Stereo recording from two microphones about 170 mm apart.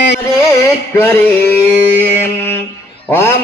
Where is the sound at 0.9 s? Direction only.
10° left (ahead or behind).